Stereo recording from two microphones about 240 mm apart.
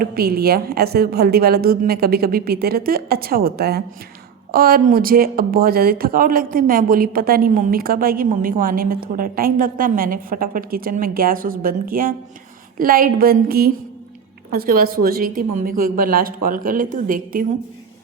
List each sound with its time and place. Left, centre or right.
0.0 s speech: right